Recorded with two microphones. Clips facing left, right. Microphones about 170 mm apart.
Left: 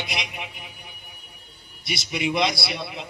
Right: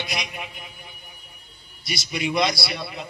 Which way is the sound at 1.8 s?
20° left (ahead or behind).